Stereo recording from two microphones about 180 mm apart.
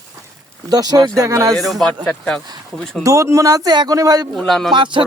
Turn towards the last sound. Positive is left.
turn(degrees=-25)  # may be behind; listen again after turning